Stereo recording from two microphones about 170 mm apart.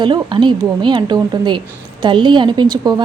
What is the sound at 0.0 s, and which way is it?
A woman's voice, 25° right (ahead or behind).